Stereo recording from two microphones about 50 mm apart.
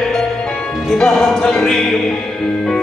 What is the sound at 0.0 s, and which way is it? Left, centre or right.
Music, centre.